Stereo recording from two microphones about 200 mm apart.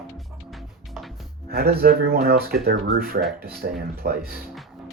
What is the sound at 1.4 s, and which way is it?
Speech, 50° right (ahead or behind).